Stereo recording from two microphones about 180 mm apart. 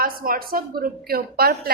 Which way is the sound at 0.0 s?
55° right (ahead or behind).